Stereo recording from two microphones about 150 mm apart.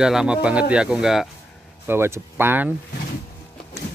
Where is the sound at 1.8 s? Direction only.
15° right (ahead or behind).